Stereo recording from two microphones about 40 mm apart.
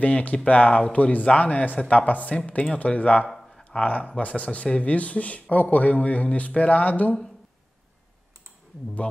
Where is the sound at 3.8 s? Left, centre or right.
Left.